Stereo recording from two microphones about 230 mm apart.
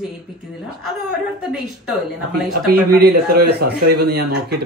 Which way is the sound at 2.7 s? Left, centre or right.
Right.